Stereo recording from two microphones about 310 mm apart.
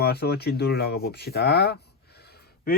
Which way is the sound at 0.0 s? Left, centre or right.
Left.